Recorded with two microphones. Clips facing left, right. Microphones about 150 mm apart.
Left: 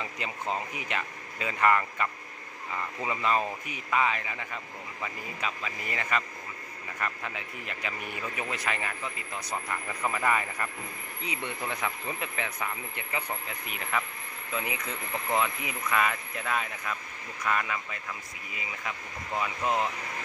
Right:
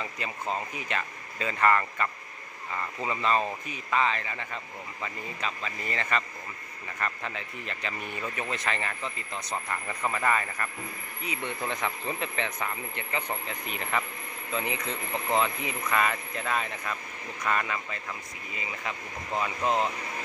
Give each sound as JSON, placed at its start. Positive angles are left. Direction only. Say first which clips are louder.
{"t": 0.0, "sound": "speech", "louder": "even", "side_deg": 15}
{"t": 11.7, "sound": "speech", "louder": "right 2 dB", "side_deg": 5}
{"t": 15.2, "sound": "speech", "louder": "right 2 dB", "side_deg": -25}
{"t": 15.6, "sound": "speech", "louder": "right 1 dB", "side_deg": 5}